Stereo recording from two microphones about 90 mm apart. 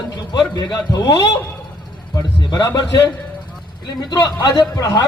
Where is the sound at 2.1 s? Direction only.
50° left (ahead or behind).